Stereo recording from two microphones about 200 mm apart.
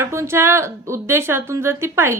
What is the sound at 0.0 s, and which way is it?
A woman's voice, 15° right (ahead or behind).